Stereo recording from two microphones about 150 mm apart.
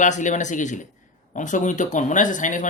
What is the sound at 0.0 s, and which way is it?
Speech, 55° left (ahead or behind).